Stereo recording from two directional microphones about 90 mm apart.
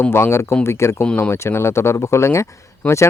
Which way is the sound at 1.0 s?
20° left (ahead or behind).